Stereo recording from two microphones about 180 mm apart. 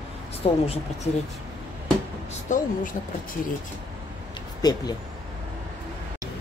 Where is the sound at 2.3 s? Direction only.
45° left (ahead or behind).